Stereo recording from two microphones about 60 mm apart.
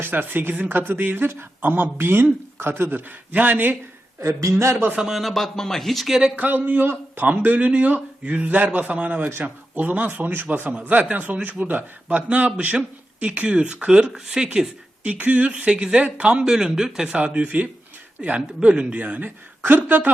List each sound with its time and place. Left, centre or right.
0.0 s speech: right
4.2 s speech: right
4.5 s a man's voice: right
4.9 s speech: centre
5.2 s speech: centre
6.3 s a man's voice: right
16.4 s speech: centre
17.2 s a man's voice: right